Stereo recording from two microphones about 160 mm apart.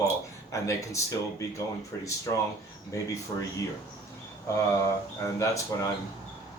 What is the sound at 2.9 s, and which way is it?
Speech, 20° left (ahead or behind).